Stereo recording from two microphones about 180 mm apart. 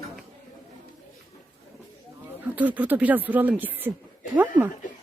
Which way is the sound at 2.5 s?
10° right (ahead or behind).